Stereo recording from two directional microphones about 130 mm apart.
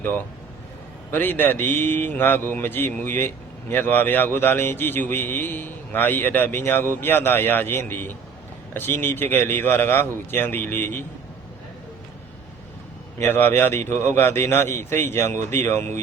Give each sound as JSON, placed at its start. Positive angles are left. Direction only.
{"t": 1.1, "sound": "a man's voice", "side_deg": 15}
{"t": 13.2, "sound": "a man's voice", "side_deg": 15}